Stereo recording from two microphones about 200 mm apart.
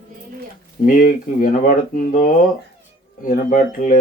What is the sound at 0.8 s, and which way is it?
Speech, 45° left (ahead or behind).